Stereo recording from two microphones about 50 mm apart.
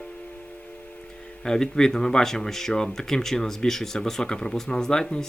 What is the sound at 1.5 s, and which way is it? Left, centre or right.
Speech, centre.